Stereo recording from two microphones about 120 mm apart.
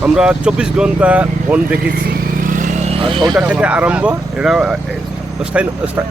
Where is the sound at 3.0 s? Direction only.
45° right (ahead or behind).